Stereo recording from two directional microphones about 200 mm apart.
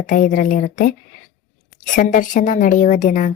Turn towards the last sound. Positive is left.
turn(degrees=40)  # may be behind; listen again after turning